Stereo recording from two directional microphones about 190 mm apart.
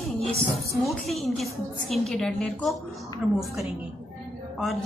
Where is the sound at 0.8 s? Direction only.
Centre (ahead or behind).